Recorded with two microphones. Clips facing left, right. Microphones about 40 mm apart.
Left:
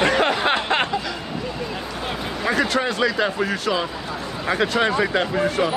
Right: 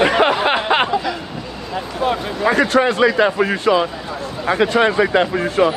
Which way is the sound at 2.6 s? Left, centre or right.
Right.